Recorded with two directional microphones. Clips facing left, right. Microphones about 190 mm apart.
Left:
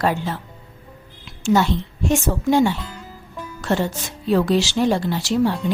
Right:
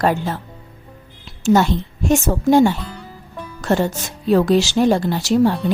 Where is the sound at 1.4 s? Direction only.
45° right (ahead or behind).